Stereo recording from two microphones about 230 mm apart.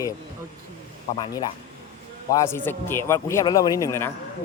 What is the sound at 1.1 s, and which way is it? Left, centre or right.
A man's voice, centre.